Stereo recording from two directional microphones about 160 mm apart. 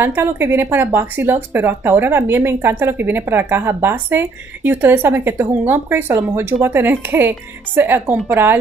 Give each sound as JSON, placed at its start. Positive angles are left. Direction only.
{"t": 0.0, "sound": "speech", "side_deg": -15}